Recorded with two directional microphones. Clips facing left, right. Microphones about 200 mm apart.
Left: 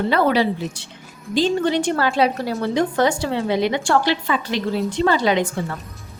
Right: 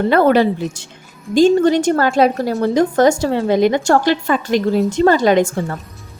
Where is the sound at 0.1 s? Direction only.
50° right (ahead or behind).